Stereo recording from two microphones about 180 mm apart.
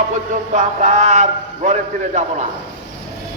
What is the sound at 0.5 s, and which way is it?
A man's voice, 40° right (ahead or behind).